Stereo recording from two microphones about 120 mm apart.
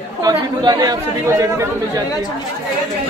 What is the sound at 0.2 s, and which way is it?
Speech, 35° right (ahead or behind).